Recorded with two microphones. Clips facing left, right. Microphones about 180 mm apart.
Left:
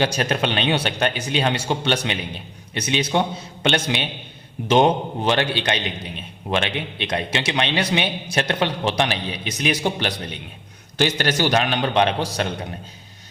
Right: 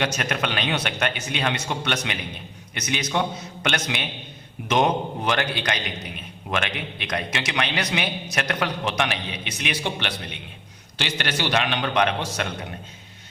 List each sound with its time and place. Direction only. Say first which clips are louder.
0.0 s a man's voice: left 4 dB; 30° left (ahead or behind)